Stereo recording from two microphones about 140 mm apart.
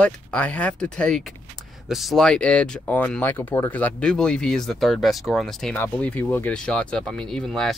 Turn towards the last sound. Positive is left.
turn(degrees=5)  # may be behind; listen again after turning